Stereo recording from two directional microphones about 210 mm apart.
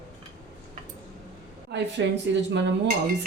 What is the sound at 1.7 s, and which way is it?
Speech, 55° right (ahead or behind).